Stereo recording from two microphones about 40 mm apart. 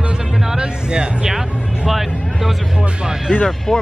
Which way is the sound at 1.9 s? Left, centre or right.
Centre.